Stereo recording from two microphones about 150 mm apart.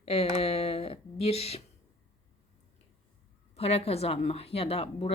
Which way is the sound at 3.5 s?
40° left (ahead or behind).